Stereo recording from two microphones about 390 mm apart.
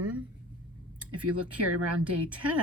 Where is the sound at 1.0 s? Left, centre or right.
Right.